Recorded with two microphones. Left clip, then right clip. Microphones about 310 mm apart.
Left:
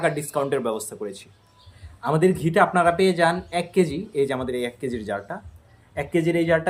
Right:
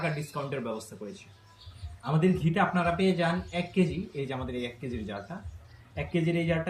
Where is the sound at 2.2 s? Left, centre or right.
Centre.